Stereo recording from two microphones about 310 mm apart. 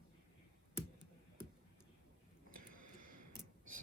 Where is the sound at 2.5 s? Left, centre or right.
Right.